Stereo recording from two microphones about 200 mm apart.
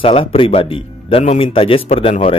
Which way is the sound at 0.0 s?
25° left (ahead or behind).